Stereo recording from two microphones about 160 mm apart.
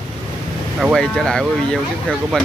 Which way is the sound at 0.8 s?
Centre (ahead or behind).